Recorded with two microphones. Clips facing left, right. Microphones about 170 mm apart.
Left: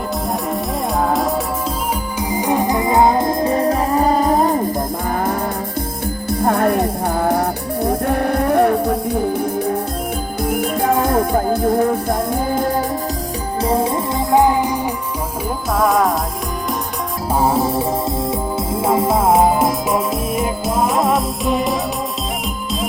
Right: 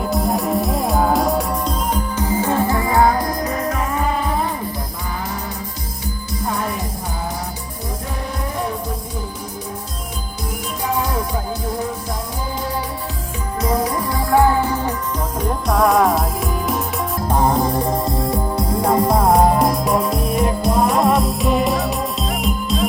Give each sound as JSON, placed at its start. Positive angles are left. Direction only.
{"t": 0.1, "sound": "music", "side_deg": 0}
{"t": 2.1, "sound": "music", "side_deg": 10}
{"t": 6.4, "sound": "music", "side_deg": 60}
{"t": 13.6, "sound": "music", "side_deg": 30}
{"t": 15.4, "sound": "music", "side_deg": 0}
{"t": 17.2, "sound": "music", "side_deg": 5}